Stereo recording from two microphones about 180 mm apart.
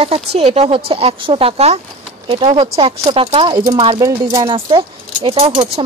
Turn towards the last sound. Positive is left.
turn(degrees=-30)  # may be behind; listen again after turning